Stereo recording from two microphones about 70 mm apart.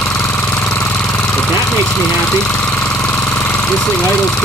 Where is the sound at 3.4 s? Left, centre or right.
Centre.